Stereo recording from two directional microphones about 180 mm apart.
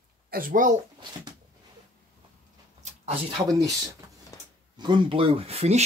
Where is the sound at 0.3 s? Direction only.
50° right (ahead or behind).